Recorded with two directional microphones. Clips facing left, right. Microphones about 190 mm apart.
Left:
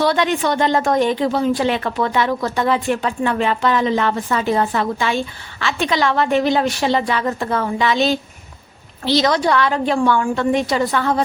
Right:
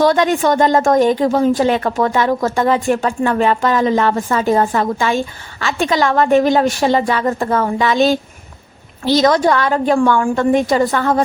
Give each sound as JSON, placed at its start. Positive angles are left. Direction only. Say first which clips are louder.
{"t": 0.0, "sound": "a woman's voice", "louder": "right 4 dB", "side_deg": -45}